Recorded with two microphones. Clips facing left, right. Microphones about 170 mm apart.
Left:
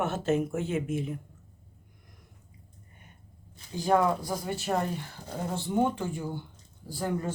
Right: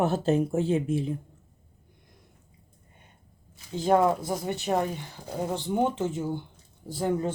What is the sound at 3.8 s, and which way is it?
Speech, 25° right (ahead or behind).